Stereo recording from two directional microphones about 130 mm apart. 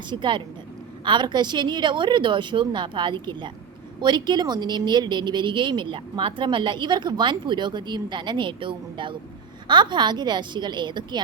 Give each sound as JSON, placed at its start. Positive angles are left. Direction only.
{"t": 0.1, "sound": "a woman's voice", "side_deg": -40}